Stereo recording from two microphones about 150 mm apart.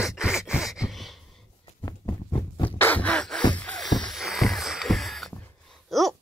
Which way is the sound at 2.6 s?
10° left (ahead or behind).